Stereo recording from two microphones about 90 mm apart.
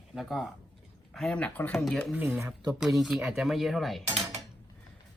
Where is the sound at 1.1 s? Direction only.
10° left (ahead or behind).